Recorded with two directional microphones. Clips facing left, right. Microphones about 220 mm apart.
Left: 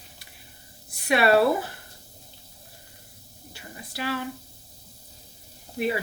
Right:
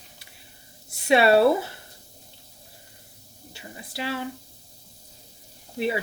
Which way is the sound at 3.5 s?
25° right (ahead or behind).